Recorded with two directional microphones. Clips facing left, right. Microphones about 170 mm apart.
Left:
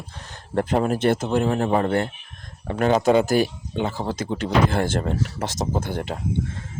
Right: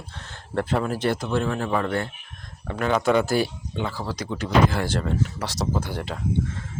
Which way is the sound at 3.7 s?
20° left (ahead or behind).